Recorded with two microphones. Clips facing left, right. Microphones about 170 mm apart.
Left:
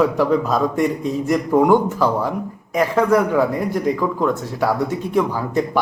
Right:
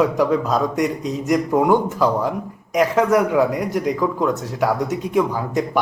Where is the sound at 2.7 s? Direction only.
15° right (ahead or behind).